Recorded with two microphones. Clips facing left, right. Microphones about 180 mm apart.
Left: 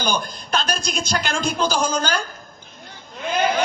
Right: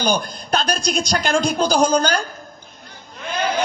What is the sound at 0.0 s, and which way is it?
A man's voice, 35° right (ahead or behind).